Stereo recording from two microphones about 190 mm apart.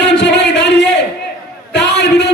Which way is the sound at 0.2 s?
65° left (ahead or behind).